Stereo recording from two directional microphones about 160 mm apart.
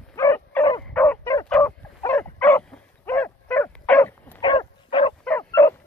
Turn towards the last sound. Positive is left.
turn(degrees=15)  # may be behind; listen again after turning